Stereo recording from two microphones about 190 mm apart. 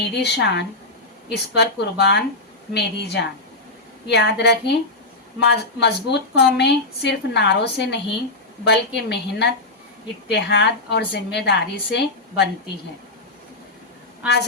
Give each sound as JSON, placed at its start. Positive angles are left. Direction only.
{"t": 0.0, "sound": "speech", "side_deg": 65}
{"t": 14.2, "sound": "a woman's voice", "side_deg": -5}